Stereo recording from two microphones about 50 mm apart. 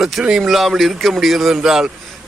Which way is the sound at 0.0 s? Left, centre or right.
Centre.